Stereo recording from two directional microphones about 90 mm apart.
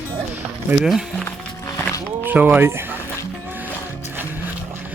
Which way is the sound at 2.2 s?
20° right (ahead or behind).